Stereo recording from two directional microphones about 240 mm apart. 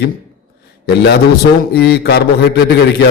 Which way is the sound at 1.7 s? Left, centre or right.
Left.